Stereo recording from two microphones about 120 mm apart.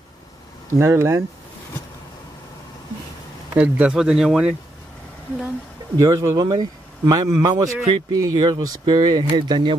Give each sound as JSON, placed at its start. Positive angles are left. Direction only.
{"t": 0.7, "sound": "speech", "side_deg": -25}
{"t": 3.5, "sound": "speech", "side_deg": -10}
{"t": 5.9, "sound": "speech", "side_deg": -30}